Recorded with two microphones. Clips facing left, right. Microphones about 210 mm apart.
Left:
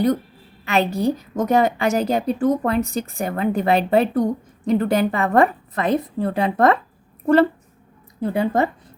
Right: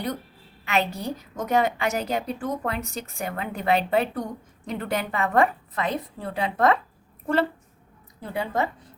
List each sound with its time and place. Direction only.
0.6 s a woman's voice: 35° left (ahead or behind)
8.2 s speech: 50° left (ahead or behind)